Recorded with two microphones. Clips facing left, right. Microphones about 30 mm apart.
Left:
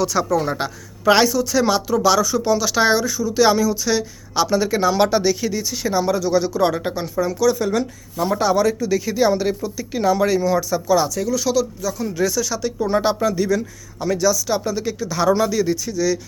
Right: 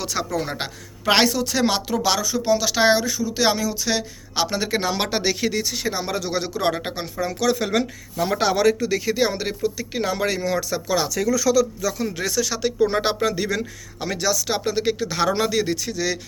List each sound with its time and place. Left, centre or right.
0.0 s speech: right
1.0 s speech: right
2.2 s speech: centre
5.2 s speech: right
5.7 s speech: right
6.6 s speech: right
7.3 s speech: right
8.9 s speech: right
13.2 s speech: right